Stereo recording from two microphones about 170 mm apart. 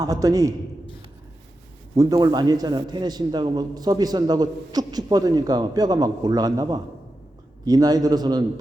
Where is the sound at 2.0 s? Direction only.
20° right (ahead or behind).